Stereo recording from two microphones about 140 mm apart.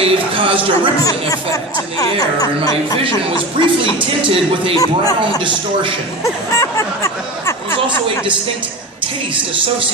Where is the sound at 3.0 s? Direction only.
40° right (ahead or behind).